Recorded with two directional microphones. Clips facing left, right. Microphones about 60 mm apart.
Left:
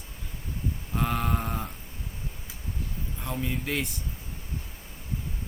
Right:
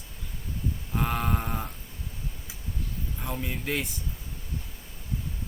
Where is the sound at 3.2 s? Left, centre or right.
Centre.